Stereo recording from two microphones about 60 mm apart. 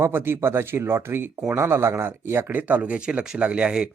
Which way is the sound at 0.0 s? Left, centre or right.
Right.